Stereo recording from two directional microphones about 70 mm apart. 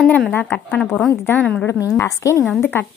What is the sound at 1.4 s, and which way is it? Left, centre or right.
Speech, centre.